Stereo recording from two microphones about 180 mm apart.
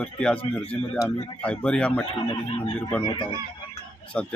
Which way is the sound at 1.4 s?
5° left (ahead or behind).